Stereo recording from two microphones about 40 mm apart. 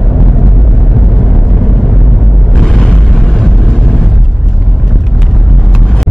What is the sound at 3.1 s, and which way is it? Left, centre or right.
Vehicle, centre.